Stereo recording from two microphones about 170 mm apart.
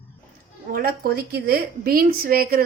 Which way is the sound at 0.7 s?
60° right (ahead or behind).